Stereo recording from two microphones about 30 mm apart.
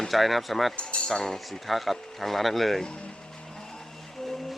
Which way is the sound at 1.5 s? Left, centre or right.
Centre.